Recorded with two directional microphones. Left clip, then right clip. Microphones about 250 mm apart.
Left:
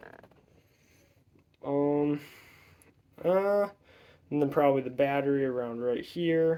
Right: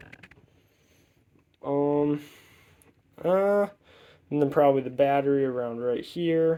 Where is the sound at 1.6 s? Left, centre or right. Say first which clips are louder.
Right 3 dB; centre.